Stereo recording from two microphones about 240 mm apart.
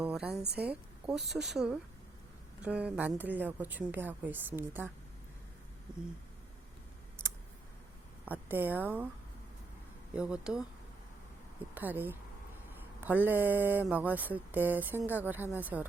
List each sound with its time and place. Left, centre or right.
0.0 s a woman's voice: centre
0.4 s a woman's voice: right
0.7 s speech: centre
7.2 s a sound: centre
8.2 s speech: centre
10.2 s speech: centre
11.7 s speech: centre